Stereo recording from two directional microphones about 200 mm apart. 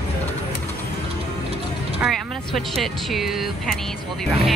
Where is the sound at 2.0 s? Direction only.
Centre (ahead or behind).